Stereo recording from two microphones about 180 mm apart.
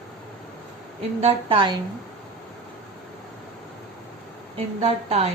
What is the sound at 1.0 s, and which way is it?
Speech, 30° right (ahead or behind).